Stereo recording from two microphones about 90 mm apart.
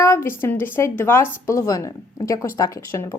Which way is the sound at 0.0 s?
30° left (ahead or behind).